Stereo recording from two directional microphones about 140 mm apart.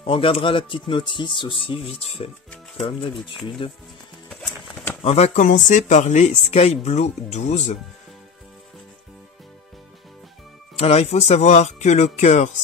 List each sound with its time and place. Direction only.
0.0 s speech: 40° left (ahead or behind)
5.0 s speech: 50° left (ahead or behind)
10.8 s speech: 50° left (ahead or behind)